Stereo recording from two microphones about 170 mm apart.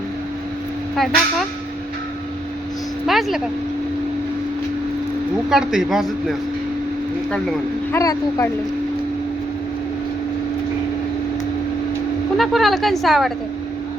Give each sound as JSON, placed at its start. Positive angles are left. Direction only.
{"t": 0.9, "sound": "a woman's voice", "side_deg": 0}
{"t": 3.1, "sound": "a woman's voice", "side_deg": 0}
{"t": 5.5, "sound": "a woman's voice", "side_deg": -5}
{"t": 7.9, "sound": "speech", "side_deg": 20}
{"t": 12.4, "sound": "a woman's voice", "side_deg": 0}